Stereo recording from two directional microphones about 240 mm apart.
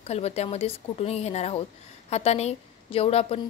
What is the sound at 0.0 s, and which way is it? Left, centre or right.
A woman's voice, left.